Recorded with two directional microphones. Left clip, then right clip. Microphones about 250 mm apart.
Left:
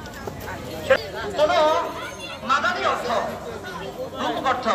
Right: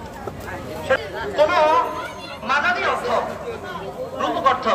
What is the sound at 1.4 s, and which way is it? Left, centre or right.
Speech, centre.